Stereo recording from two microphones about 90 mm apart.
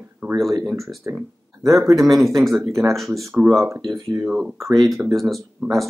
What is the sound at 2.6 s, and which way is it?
Speech, 35° right (ahead or behind).